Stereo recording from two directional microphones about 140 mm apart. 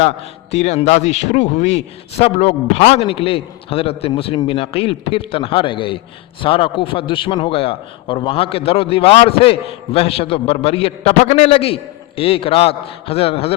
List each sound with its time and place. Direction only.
0.0 s a man's voice: 50° left (ahead or behind)